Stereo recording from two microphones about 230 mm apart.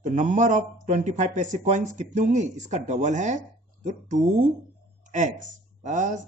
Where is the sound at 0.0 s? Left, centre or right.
Right.